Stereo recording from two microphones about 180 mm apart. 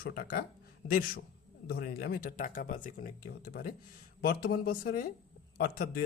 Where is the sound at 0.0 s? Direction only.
55° left (ahead or behind).